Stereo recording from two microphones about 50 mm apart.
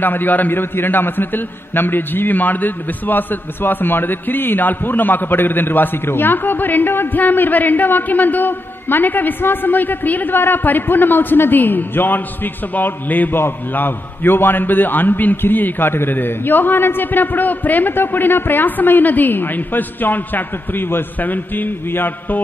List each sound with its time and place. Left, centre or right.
0.0 s a man's voice: left